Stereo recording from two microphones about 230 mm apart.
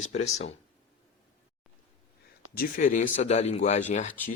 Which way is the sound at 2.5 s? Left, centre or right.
Left.